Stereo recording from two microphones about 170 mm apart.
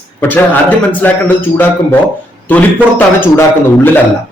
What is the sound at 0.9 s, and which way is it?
A man's voice, 10° left (ahead or behind).